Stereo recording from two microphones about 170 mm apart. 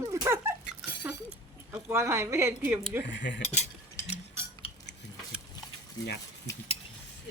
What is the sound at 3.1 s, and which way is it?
Cutlery, 90° left.